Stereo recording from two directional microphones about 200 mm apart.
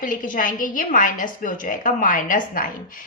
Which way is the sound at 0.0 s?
40° left (ahead or behind).